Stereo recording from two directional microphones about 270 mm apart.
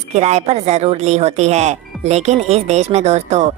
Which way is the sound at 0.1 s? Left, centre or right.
Right.